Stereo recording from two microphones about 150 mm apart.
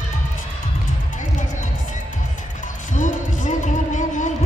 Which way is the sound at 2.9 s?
55° left (ahead or behind).